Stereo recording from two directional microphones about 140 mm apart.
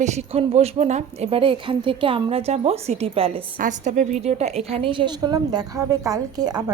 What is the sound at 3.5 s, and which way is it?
A woman's voice, 65° right (ahead or behind).